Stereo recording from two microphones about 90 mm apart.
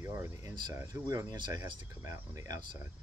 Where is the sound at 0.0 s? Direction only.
35° right (ahead or behind).